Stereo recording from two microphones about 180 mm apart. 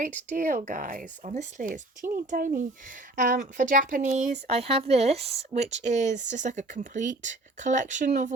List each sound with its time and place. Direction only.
0.3 s speech: 45° right (ahead or behind)